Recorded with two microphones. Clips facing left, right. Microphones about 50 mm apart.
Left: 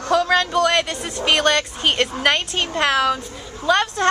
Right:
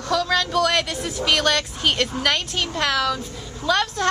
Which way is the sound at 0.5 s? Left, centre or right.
Centre.